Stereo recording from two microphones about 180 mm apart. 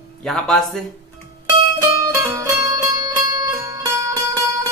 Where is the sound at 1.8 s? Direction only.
15° right (ahead or behind).